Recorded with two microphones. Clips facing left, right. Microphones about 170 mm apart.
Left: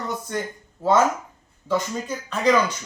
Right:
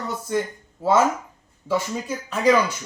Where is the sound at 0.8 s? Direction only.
5° right (ahead or behind).